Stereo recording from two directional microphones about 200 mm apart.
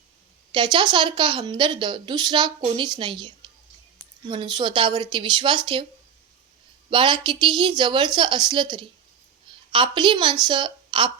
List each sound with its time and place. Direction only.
0.5 s a woman's voice: 25° right (ahead or behind)
6.9 s a woman's voice: 25° right (ahead or behind)